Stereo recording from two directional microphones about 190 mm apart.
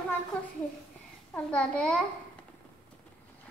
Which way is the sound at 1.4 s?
5° left (ahead or behind).